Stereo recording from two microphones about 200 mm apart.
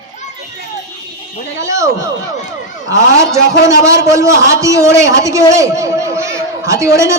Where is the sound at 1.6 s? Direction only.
15° right (ahead or behind).